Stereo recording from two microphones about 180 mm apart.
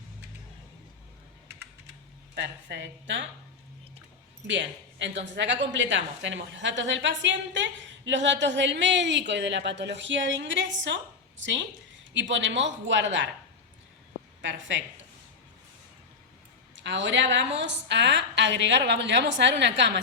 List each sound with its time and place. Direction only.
2.3 s a woman's voice: 75° right (ahead or behind)
4.4 s a woman's voice: 85° right
16.7 s a woman's voice: 90° right